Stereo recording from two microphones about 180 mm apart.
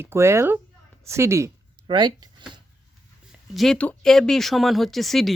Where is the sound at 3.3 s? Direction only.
Centre (ahead or behind).